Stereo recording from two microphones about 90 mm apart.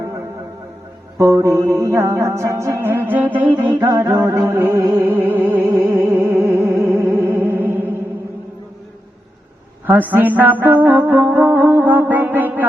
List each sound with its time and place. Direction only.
1.2 s music: 35° right (ahead or behind)
10.1 s music: 20° right (ahead or behind)